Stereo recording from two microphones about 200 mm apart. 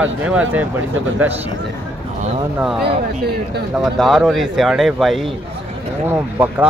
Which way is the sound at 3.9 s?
Centre (ahead or behind).